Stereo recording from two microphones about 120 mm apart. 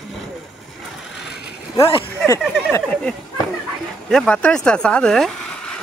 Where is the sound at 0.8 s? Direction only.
Centre (ahead or behind).